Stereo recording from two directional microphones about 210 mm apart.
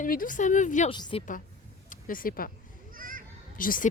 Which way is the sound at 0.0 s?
40° left (ahead or behind).